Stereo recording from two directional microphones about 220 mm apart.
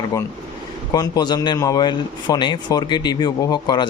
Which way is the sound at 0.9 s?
15° left (ahead or behind).